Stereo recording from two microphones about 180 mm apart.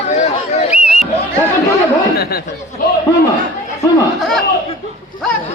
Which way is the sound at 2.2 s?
60° left (ahead or behind).